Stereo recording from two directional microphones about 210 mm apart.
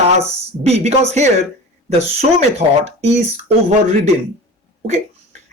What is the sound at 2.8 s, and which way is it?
Speech, 30° right (ahead or behind).